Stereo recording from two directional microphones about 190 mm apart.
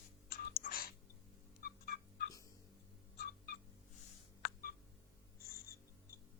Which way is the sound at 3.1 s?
55° left (ahead or behind).